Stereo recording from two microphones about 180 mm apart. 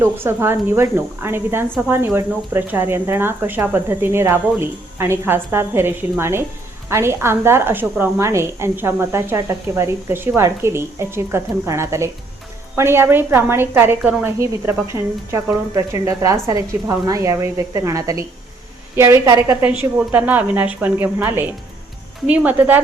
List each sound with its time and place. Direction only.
0.0 s speech: 15° right (ahead or behind)